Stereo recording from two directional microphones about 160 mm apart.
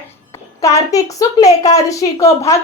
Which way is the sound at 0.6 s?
20° left (ahead or behind).